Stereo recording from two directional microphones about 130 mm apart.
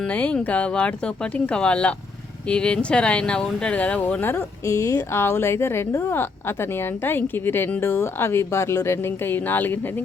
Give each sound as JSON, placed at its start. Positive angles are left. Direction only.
{"t": 0.0, "sound": "speech", "side_deg": 10}